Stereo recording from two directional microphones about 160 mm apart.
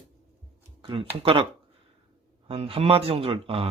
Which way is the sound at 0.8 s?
35° right (ahead or behind).